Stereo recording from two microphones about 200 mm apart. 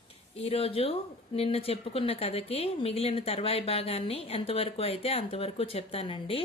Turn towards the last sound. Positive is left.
turn(degrees=30)  # may be behind; listen again after turning